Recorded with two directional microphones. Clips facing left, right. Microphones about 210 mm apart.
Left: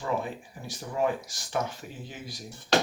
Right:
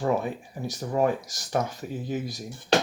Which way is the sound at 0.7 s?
40° right (ahead or behind).